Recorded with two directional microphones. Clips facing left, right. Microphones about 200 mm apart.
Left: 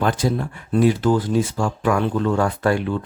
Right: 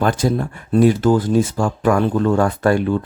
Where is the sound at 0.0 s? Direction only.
45° right (ahead or behind).